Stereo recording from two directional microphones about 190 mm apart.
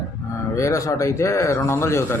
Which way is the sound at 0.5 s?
15° left (ahead or behind).